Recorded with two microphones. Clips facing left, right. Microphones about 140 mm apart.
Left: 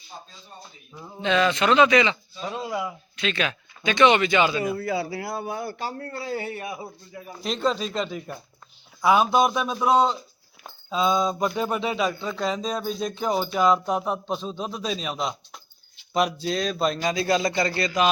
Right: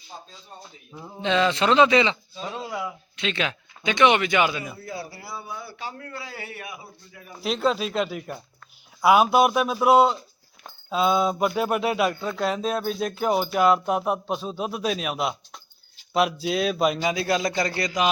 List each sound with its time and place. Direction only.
1.2 s a man's voice: 25° right (ahead or behind)
2.4 s speech: 15° left (ahead or behind)
2.6 s speech: centre (ahead or behind)
3.2 s speech: 20° right (ahead or behind)
4.8 s a man's voice: 85° left; by 5.7 s 60° left (ahead or behind)
5.7 s a man's voice: 40° left (ahead or behind)
7.4 s speech: 5° right (ahead or behind)
17.4 s speech: 5° left (ahead or behind)
17.7 s speech: 15° right (ahead or behind)